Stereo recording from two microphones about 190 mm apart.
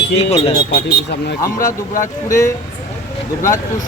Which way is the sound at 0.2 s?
30° left (ahead or behind).